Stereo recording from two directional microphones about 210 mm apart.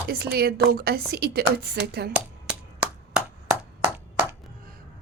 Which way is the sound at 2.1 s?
5° right (ahead or behind).